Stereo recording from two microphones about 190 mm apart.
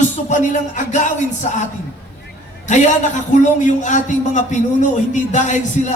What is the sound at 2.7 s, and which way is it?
Speech, 40° left (ahead or behind).